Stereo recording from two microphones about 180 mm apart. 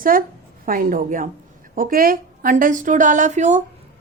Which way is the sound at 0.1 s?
50° right (ahead or behind).